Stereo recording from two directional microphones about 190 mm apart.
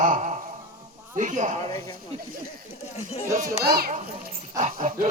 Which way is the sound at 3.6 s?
55° right (ahead or behind).